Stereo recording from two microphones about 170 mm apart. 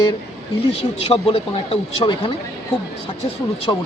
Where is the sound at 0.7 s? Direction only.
35° left (ahead or behind).